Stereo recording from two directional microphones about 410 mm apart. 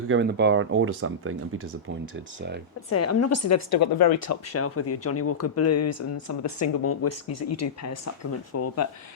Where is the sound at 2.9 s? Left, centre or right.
Left.